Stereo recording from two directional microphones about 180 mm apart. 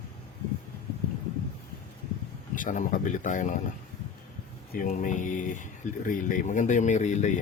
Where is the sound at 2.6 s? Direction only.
45° left (ahead or behind).